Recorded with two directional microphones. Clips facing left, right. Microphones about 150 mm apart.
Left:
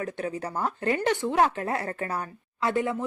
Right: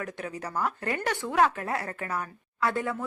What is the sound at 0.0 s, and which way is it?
Speech, 25° left (ahead or behind).